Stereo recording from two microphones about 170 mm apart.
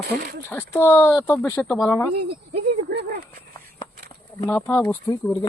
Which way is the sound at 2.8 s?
70° right (ahead or behind).